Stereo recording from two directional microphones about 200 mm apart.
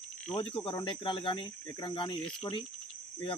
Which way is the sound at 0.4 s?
25° left (ahead or behind).